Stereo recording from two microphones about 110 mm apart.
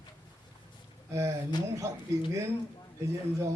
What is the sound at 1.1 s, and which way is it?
Speech, 30° right (ahead or behind).